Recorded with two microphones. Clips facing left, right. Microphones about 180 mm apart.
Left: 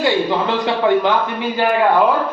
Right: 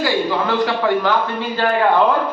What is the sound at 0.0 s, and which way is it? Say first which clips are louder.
A man's voice: left 2 dB; 20° left (ahead or behind).